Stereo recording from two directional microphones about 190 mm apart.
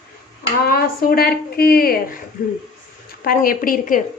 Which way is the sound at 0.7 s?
55° left (ahead or behind).